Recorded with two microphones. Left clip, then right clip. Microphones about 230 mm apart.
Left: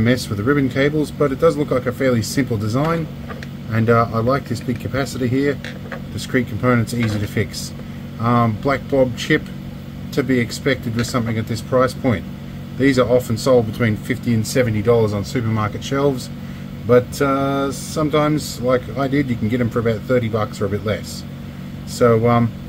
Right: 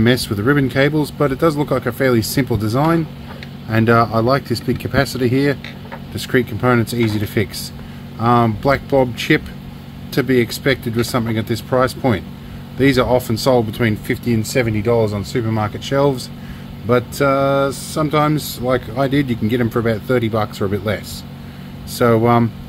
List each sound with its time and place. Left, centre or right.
0.0 s speech: right
8.2 s speech: right